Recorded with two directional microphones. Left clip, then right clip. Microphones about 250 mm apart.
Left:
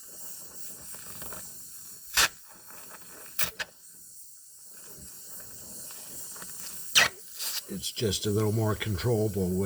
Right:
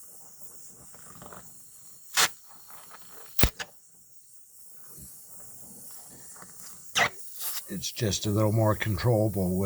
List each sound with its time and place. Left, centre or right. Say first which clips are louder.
0.6 s a sound: left 6 dB; centre
5.4 s mechanisms: left 5 dB; centre
7.8 s speech: even; right